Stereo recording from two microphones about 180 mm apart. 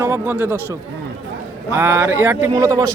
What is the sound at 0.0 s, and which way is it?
Speech, 10° right (ahead or behind).